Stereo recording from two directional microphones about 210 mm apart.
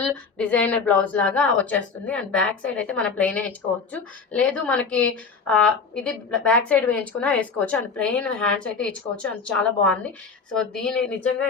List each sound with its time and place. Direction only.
0.0 s a woman's voice: 5° left (ahead or behind)